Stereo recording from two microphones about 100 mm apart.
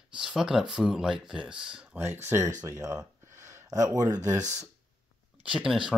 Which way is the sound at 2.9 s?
35° right (ahead or behind).